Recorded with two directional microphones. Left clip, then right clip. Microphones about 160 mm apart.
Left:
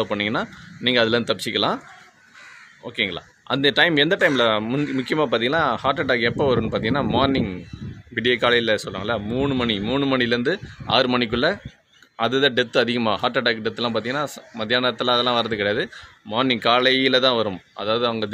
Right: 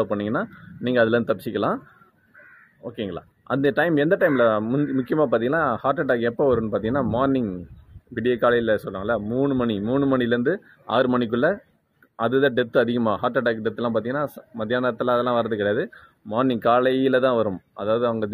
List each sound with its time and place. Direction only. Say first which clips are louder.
0.0 s a man's voice: left 1 dB; 20° left (ahead or behind)
2.8 s a man's voice: left 6 dB; 20° left (ahead or behind)
10.1 s speech: left 4 dB; 55° left (ahead or behind)
10.4 s a man's voice: even; 20° left (ahead or behind)